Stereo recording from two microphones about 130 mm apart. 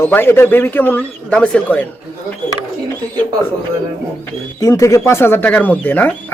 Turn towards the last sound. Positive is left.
turn(degrees=10)  # may be behind; listen again after turning